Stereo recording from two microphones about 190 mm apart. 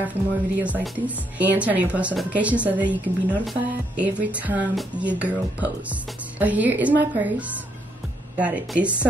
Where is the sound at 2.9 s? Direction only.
10° left (ahead or behind).